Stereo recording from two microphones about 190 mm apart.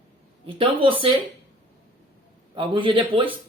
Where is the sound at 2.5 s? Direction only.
25° right (ahead or behind).